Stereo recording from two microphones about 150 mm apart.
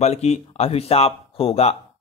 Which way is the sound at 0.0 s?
45° left (ahead or behind).